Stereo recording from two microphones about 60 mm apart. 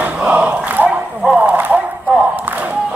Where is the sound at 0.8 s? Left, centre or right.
Centre.